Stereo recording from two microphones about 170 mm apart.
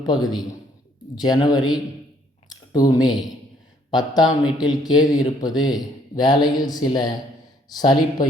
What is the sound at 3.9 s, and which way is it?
Speech, 25° left (ahead or behind).